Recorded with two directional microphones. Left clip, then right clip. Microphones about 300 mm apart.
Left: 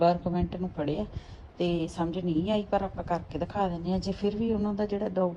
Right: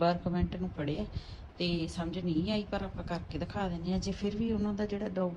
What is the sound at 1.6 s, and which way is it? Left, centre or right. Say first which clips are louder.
A woman's voice: left 6 dB; centre.